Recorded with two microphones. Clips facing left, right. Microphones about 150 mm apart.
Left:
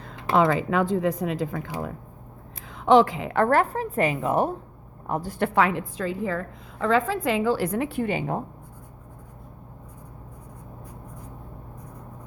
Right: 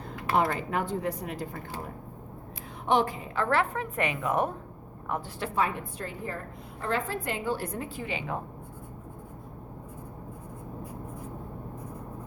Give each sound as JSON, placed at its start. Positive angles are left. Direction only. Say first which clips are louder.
{"t": 0.1, "sound": "a woman's voice", "louder": "left 6 dB", "side_deg": 90}
{"t": 5.4, "sound": "a woman's voice", "louder": "left 8 dB", "side_deg": 75}
{"t": 8.0, "sound": "speech", "louder": "left 7 dB", "side_deg": 50}